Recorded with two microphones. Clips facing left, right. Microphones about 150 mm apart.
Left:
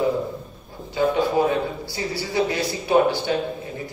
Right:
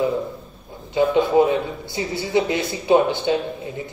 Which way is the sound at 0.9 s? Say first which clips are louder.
Right 4 dB; 20° right (ahead or behind).